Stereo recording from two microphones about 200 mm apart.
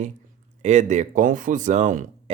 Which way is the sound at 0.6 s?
35° right (ahead or behind).